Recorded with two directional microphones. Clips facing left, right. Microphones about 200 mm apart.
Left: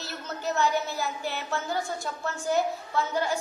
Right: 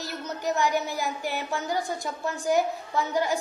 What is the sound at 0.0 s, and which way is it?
A woman's voice, 15° right (ahead or behind).